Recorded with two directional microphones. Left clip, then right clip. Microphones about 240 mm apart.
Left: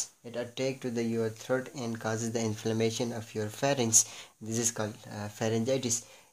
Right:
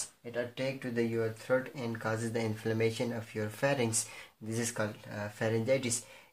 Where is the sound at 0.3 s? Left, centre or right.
Left.